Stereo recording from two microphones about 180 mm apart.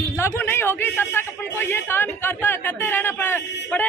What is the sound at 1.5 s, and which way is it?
Speech, 15° left (ahead or behind).